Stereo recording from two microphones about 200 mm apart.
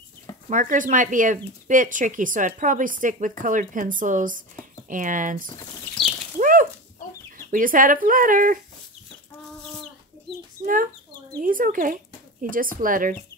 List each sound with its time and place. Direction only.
0.5 s speech: 40° right (ahead or behind)
6.4 s a sound: 45° right (ahead or behind)
7.5 s speech: 45° right (ahead or behind)
10.6 s speech: 45° right (ahead or behind)